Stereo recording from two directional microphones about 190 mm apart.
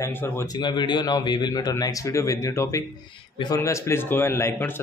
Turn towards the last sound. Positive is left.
turn(degrees=10)  # may be behind; listen again after turning